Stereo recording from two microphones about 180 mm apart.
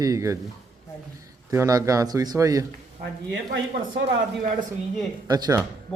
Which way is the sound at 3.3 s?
90° right.